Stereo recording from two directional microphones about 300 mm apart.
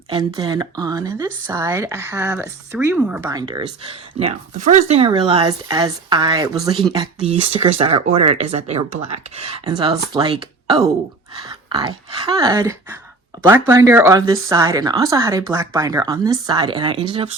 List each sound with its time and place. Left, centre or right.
0.1 s speech: centre
11.4 s speech: centre